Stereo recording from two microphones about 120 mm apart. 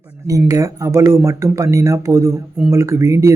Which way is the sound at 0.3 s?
30° right (ahead or behind).